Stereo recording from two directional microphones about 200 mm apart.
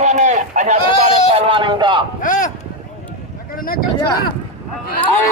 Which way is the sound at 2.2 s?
40° left (ahead or behind).